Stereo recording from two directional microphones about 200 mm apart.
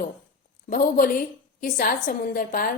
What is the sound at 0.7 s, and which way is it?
Speech, 45° left (ahead or behind).